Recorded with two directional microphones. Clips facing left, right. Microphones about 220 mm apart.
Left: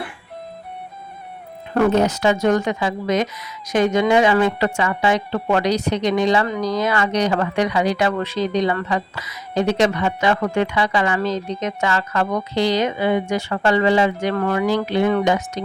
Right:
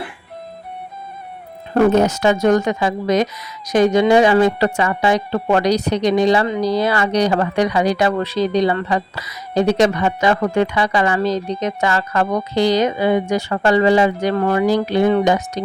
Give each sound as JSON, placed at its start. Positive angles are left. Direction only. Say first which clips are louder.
{"t": 1.9, "sound": "speech", "louder": "right 2 dB", "side_deg": -45}